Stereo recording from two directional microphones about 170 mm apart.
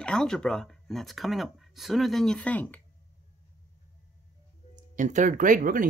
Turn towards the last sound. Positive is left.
turn(degrees=-55)  # may be behind; listen again after turning